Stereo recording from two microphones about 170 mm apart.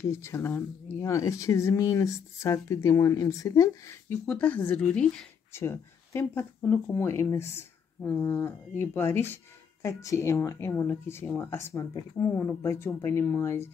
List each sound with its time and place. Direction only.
0.1 s speech: 15° left (ahead or behind)